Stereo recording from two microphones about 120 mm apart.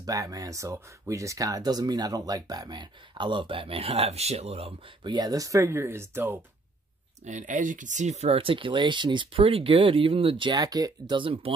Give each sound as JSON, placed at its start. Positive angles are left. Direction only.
{"t": 0.0, "sound": "speech", "side_deg": -30}
{"t": 7.2, "sound": "speech", "side_deg": -90}